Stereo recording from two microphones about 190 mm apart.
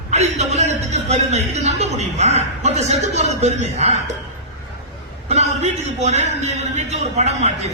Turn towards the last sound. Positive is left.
turn(degrees=-35)  # may be behind; listen again after turning